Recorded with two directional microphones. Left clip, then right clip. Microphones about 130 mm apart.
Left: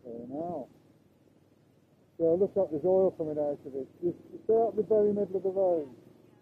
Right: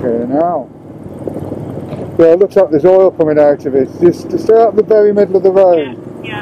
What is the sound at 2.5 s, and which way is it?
Speech, 20° right (ahead or behind).